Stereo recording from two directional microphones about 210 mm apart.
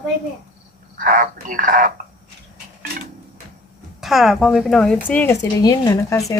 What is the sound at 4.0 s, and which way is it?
Speech, centre (ahead or behind).